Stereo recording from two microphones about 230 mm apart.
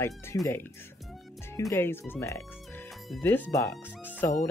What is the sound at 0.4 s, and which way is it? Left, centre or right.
Speech, centre.